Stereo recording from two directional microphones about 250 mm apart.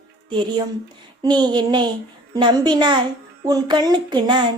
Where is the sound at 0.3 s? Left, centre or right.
Centre.